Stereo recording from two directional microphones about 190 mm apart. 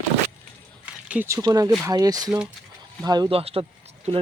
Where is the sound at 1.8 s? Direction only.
20° right (ahead or behind).